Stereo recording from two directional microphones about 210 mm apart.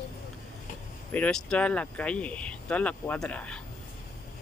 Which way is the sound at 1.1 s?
5° left (ahead or behind).